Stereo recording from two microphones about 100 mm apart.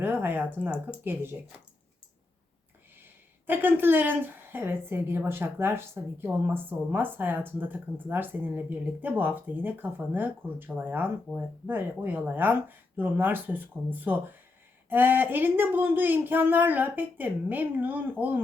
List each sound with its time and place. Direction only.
0.0 s a woman's voice: 20° right (ahead or behind)
3.4 s a woman's voice: 20° right (ahead or behind)